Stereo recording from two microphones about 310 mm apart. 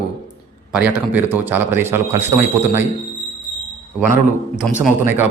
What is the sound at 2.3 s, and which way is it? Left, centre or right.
Speech, right.